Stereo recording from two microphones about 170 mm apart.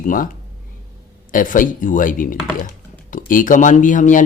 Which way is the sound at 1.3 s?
50° left (ahead or behind).